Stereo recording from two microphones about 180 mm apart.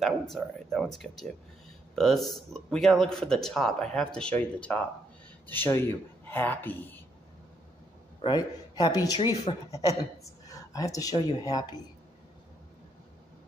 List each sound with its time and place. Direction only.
0.0 s a man's voice: centre (ahead or behind)
8.2 s a man's voice: 20° left (ahead or behind)